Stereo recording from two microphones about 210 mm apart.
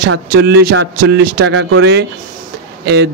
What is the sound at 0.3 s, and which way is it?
Speech, 50° right (ahead or behind).